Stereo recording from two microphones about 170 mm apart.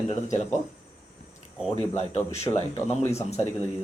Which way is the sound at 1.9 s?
40° left (ahead or behind).